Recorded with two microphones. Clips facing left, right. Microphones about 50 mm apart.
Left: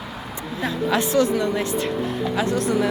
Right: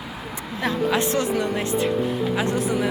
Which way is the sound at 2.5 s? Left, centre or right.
Centre.